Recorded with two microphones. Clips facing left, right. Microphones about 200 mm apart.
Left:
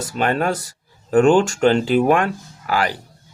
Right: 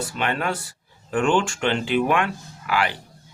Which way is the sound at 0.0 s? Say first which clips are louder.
Left 5 dB; 40° left (ahead or behind).